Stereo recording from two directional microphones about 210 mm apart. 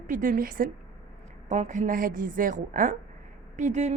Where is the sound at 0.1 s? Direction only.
40° right (ahead or behind).